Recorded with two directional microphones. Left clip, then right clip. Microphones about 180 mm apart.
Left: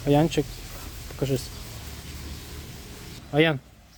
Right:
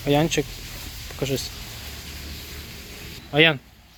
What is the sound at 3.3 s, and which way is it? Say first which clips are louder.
Speech: right 4 dB; 15° left (ahead or behind).